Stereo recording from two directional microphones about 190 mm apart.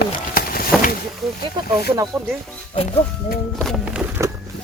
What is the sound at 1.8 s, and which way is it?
Speech, 20° right (ahead or behind).